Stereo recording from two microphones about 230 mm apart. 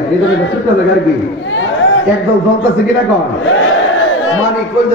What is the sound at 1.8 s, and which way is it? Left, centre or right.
Chatter, left.